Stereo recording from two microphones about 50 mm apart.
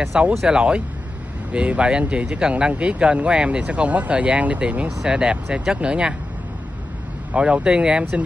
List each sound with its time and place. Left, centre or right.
0.1 s speech: right
4.8 s speech: centre
7.3 s speech: right